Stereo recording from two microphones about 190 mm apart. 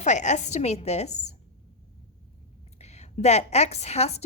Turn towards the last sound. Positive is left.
turn(degrees=35)  # may be behind; listen again after turning